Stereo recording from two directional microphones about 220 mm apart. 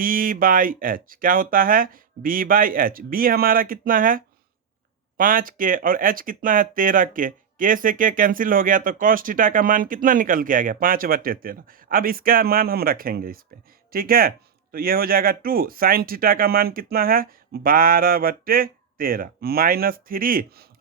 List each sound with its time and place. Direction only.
0.0 s speech: 40° right (ahead or behind)